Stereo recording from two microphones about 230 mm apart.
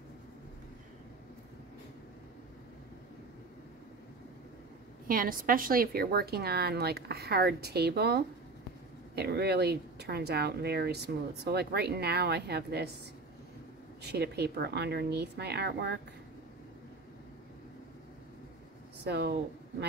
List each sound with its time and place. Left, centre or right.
5.0 s a woman's voice: right
14.0 s a woman's voice: right
19.0 s a woman's voice: right